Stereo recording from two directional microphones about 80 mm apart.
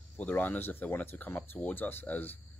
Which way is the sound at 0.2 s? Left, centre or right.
Left.